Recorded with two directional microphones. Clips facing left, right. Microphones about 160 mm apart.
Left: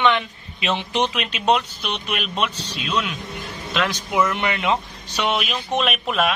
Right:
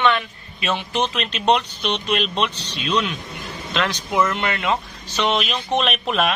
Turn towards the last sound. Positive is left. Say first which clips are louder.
# even
turn(degrees=0)  # may be behind; listen again after turning